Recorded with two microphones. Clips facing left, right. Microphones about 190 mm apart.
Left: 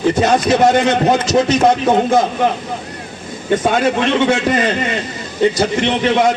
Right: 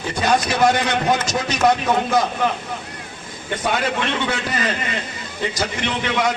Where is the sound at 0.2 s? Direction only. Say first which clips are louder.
Left 2 dB; 25° left (ahead or behind).